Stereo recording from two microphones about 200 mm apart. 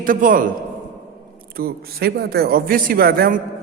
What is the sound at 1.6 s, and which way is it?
A man's voice, 50° right (ahead or behind).